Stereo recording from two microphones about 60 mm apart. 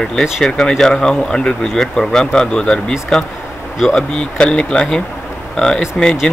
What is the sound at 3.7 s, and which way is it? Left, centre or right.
Speech, centre.